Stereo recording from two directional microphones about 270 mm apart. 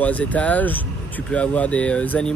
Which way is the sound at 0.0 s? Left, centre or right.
Centre.